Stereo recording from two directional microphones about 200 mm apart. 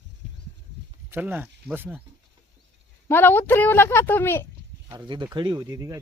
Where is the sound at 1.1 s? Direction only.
10° right (ahead or behind).